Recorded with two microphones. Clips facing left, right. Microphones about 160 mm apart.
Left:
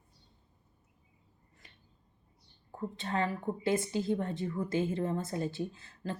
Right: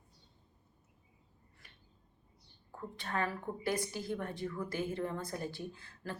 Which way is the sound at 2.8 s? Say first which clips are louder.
Left 4 dB; 25° left (ahead or behind).